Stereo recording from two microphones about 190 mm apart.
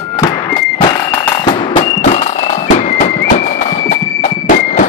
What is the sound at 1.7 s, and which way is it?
Fireworks, 25° left (ahead or behind).